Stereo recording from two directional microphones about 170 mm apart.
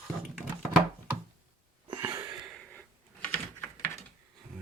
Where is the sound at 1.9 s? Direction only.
25° right (ahead or behind).